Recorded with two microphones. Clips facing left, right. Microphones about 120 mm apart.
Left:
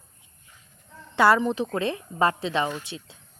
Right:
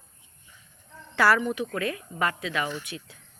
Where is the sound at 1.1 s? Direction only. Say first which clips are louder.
Left 3 dB; 25° left (ahead or behind).